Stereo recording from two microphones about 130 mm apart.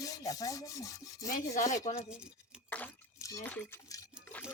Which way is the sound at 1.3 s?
75° left (ahead or behind).